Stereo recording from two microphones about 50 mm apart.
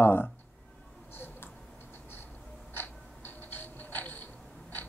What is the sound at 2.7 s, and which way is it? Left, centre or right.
Creak, left.